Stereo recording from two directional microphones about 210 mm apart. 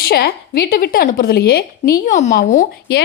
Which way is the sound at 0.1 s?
50° left (ahead or behind).